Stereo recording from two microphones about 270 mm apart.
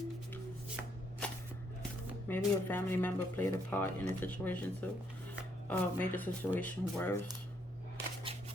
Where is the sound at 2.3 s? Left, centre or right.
Centre.